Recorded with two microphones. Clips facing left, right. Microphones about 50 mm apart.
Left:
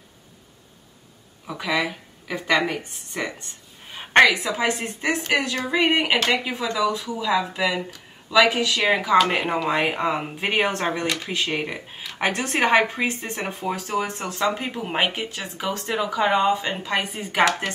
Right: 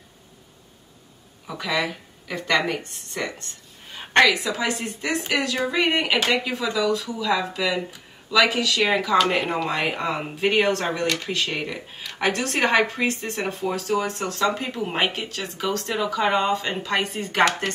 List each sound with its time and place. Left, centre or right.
1.5 s a woman's voice: centre
9.7 s speech: centre